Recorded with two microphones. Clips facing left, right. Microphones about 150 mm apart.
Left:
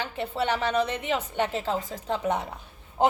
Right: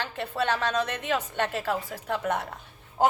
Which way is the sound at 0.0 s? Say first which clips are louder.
Left 1 dB; 15° left (ahead or behind).